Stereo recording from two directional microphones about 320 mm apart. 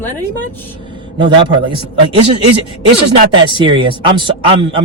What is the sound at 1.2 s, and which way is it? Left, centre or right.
Speech, centre.